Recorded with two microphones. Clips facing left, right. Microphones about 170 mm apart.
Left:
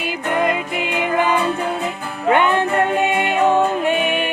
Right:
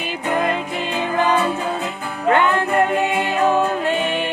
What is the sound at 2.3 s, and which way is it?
Music, 20° left (ahead or behind).